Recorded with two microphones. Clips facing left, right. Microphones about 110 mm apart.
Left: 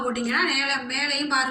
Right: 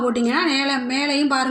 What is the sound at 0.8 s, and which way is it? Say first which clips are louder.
Speech: right 9 dB; 5° right (ahead or behind).